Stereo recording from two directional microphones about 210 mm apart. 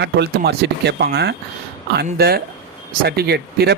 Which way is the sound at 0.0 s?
55° right (ahead or behind).